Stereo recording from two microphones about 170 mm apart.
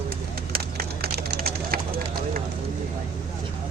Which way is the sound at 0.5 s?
60° right (ahead or behind).